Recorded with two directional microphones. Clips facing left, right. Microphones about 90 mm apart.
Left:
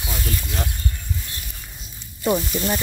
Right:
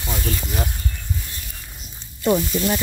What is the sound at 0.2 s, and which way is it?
Speech, 30° right (ahead or behind).